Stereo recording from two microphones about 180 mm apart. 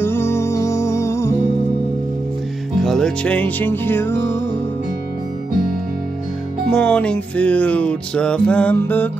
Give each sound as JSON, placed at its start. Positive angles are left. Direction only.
{"t": 0.0, "sound": "music", "side_deg": 15}
{"t": 2.8, "sound": "music", "side_deg": 0}
{"t": 6.7, "sound": "music", "side_deg": 5}